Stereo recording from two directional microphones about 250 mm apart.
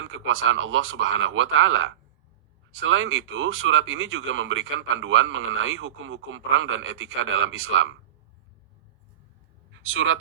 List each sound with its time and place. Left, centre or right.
0.1 s speech: right
9.8 s speech: right